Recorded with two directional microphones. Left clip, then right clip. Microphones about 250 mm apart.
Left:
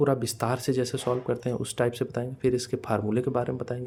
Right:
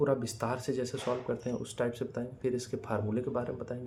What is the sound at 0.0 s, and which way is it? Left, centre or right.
Speech, left.